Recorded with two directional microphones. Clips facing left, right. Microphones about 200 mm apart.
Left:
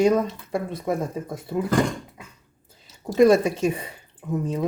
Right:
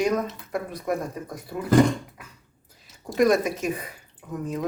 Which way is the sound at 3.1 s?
30° left (ahead or behind).